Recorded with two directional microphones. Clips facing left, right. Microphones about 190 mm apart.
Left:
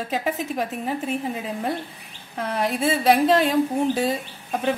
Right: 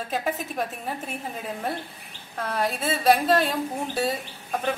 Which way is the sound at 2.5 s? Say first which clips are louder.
Left 4 dB; 10° left (ahead or behind).